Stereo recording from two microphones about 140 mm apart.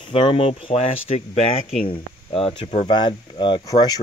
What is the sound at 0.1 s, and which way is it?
Speech, 40° left (ahead or behind).